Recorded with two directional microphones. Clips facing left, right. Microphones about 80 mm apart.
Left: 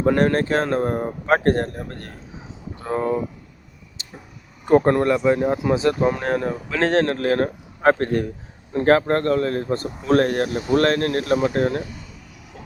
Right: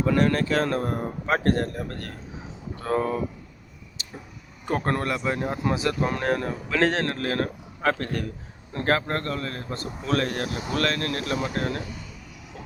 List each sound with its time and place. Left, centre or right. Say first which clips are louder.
0.0 s speech: left 4 dB; left
2.7 s speech: left 2 dB; centre
4.0 s a sound: even; left
4.7 s speech: left 10 dB; centre
5.7 s speech: left 7 dB; left
6.0 s speech: left 4 dB; centre
7.1 s speech: left 7 dB; left